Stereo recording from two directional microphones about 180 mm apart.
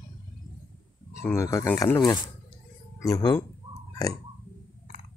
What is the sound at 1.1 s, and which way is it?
Speech, 15° left (ahead or behind).